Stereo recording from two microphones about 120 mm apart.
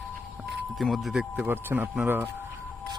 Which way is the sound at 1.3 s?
15° right (ahead or behind).